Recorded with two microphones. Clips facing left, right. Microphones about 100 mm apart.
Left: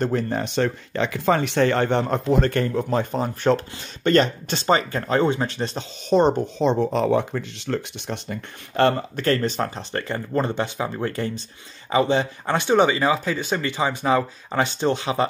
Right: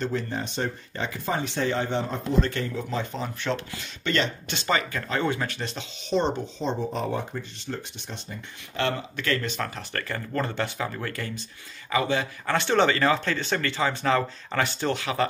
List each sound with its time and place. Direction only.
0.0 s speech: 50° left (ahead or behind)
6.6 s speech: 75° left (ahead or behind)
8.7 s speech: 45° left (ahead or behind); by 12.5 s 30° left (ahead or behind)
12.5 s speech: 15° left (ahead or behind)